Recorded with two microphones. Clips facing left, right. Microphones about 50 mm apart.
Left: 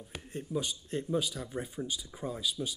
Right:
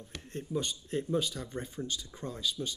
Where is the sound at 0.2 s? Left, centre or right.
Centre.